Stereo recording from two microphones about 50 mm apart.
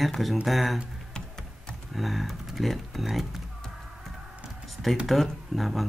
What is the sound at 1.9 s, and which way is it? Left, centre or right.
Speech, centre.